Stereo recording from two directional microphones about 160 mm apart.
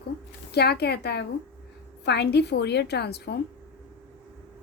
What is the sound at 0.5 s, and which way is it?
A woman's voice, 90° left.